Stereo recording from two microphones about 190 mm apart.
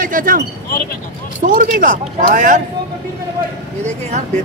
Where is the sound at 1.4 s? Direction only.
45° right (ahead or behind).